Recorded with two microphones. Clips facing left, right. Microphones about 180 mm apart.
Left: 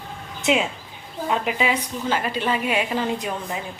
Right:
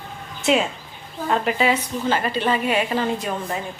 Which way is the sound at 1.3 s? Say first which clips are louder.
Right 3 dB; 10° left (ahead or behind).